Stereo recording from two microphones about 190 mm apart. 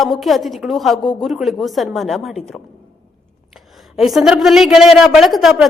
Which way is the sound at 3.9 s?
Centre (ahead or behind).